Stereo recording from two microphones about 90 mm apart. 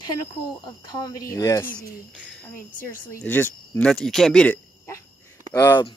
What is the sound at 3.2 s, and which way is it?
Speech, 20° left (ahead or behind).